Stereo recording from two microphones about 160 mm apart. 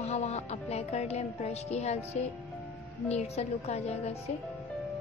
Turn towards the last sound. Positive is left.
turn(degrees=40)  # may be behind; listen again after turning